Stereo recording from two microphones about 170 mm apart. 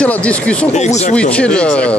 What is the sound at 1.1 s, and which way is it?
Speech, 5° left (ahead or behind).